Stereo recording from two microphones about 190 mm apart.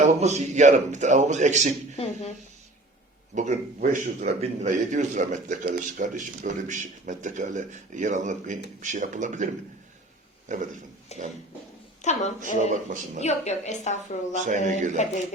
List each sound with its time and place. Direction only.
0.0 s speech: 35° right (ahead or behind)
3.3 s speech: 40° right (ahead or behind)
10.5 s speech: 40° right (ahead or behind)
11.1 s a woman's voice: 35° left (ahead or behind)
12.6 s speech: 40° right (ahead or behind)
13.2 s a woman's voice: 35° left (ahead or behind)
14.4 s speech: 40° right (ahead or behind)